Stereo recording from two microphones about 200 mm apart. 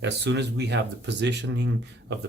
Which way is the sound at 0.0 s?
60° right (ahead or behind).